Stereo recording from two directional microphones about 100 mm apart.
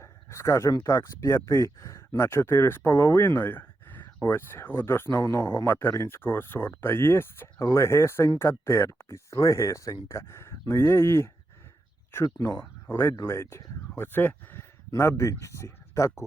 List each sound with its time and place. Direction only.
0.0 s speech: 30° left (ahead or behind)